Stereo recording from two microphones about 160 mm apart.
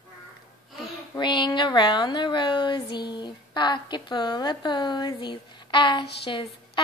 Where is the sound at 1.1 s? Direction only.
30° left (ahead or behind).